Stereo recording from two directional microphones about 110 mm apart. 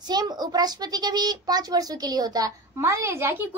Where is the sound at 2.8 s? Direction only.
25° right (ahead or behind).